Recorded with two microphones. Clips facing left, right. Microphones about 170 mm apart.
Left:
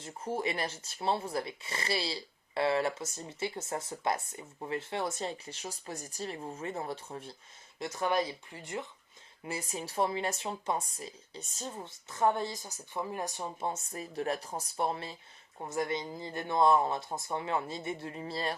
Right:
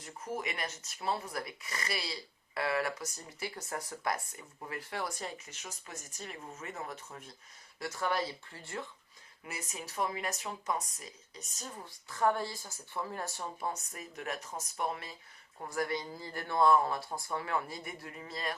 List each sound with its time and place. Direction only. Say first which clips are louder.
0.0 s speech: left 4 dB; 25° left (ahead or behind)
7.8 s speech: left 3 dB; 20° left (ahead or behind)
9.4 s speech: left 6 dB; 30° left (ahead or behind)